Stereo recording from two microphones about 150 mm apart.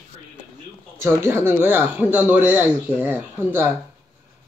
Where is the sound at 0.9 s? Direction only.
15° right (ahead or behind).